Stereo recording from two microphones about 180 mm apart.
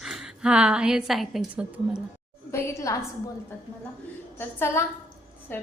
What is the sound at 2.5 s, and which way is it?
Speech, 15° left (ahead or behind).